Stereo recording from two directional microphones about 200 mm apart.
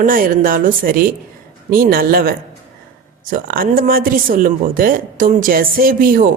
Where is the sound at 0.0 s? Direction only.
45° right (ahead or behind).